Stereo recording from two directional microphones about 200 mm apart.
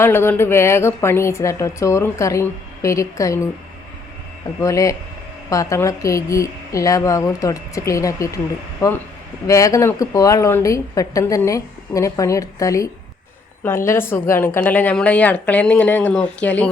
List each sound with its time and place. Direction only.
0.0 s a woman's voice: 10° left (ahead or behind)
4.6 s a woman's voice: 15° left (ahead or behind)
9.5 s a woman's voice: 15° left (ahead or behind)